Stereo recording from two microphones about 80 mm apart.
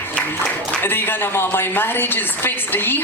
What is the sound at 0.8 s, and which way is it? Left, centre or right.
A woman's voice, left.